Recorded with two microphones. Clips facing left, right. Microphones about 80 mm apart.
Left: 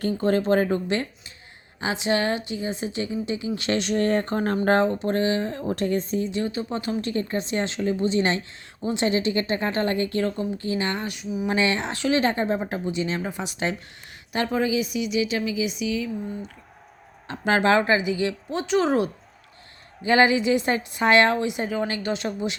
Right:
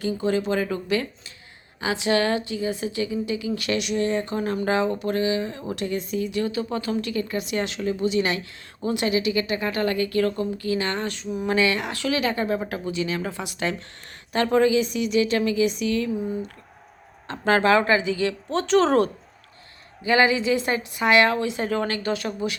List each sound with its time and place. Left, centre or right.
0.2 s speech: left
1.8 s a woman's voice: left
4.9 s speech: left
7.1 s a woman's voice: left; by 11.3 s centre
11.4 s a woman's voice: left
14.3 s a woman's voice: centre
16.1 s speech: centre
17.2 s a woman's voice: centre
20.1 s a woman's voice: left
21.9 s a woman's voice: left